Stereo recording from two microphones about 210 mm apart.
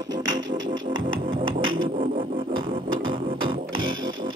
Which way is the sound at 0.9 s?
70° right (ahead or behind).